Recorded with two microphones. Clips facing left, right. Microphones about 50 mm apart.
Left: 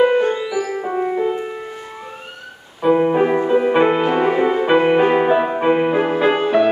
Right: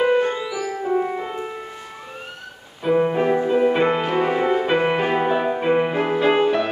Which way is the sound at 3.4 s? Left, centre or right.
Centre.